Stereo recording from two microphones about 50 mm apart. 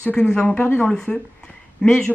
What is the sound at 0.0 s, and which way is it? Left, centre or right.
Speech, centre.